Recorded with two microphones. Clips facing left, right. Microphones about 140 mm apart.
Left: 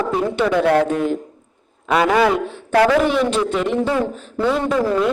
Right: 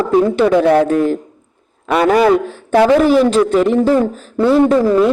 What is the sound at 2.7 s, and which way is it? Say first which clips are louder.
Speech: right 4 dB; 25° right (ahead or behind).